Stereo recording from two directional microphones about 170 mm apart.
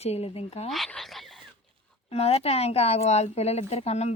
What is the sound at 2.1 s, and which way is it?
Speech, 35° left (ahead or behind).